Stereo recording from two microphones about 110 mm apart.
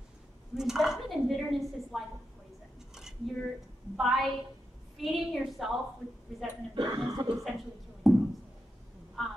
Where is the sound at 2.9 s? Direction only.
5° right (ahead or behind).